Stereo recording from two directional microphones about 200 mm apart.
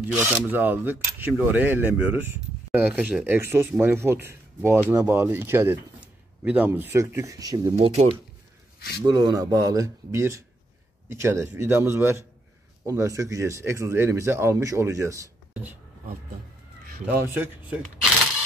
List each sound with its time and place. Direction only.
0.1 s speech: 10° right (ahead or behind); by 8.2 s 30° right (ahead or behind)
8.7 s a sound: 55° left (ahead or behind)
9.0 s speech: 20° right (ahead or behind)
17.0 s speech: 10° right (ahead or behind)